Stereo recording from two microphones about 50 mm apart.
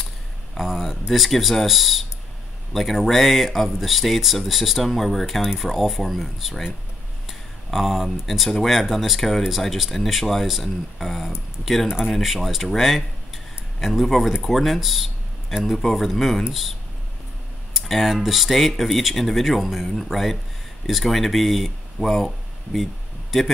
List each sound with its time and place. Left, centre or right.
0.6 s speech: centre
17.7 s speech: centre